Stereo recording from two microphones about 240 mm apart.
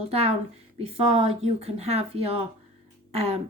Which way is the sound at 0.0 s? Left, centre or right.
Right.